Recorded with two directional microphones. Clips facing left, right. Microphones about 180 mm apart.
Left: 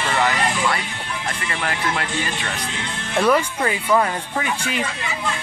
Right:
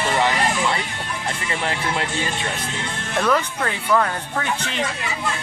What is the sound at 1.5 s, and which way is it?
Speech, 25° right (ahead or behind).